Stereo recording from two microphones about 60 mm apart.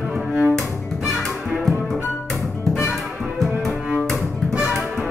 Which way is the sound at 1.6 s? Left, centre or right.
Centre.